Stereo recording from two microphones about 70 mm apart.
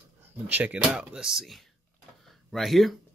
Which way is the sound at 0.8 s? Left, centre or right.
Centre.